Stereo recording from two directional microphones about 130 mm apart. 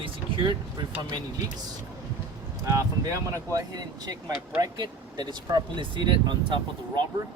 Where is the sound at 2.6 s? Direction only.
25° right (ahead or behind).